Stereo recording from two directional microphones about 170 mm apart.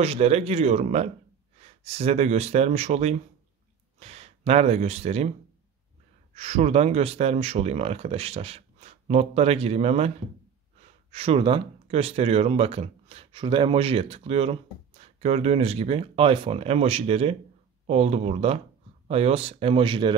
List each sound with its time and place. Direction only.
0.0 s speech: 35° right (ahead or behind)
6.3 s speech: 40° right (ahead or behind)